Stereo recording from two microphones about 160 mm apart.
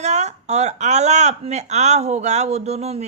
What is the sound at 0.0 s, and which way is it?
Speech, 45° right (ahead or behind).